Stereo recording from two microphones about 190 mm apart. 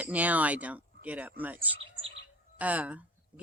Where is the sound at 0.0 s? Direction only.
10° right (ahead or behind).